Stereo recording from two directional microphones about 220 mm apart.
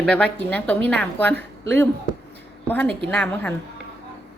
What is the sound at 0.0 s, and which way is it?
A woman's voice, 5° left (ahead or behind).